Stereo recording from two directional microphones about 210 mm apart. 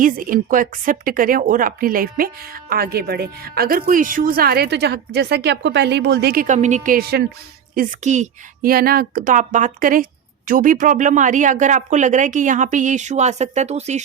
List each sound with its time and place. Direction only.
0.0 s a woman's voice: 40° right (ahead or behind)
7.8 s a woman's voice: 35° right (ahead or behind)